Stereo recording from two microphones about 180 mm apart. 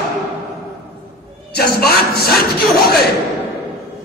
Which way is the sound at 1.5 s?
60° left (ahead or behind).